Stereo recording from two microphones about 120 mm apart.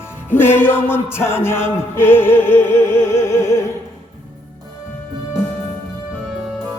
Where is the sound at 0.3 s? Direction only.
20° left (ahead or behind).